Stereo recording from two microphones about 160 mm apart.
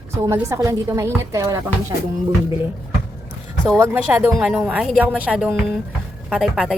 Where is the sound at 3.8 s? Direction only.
15° right (ahead or behind).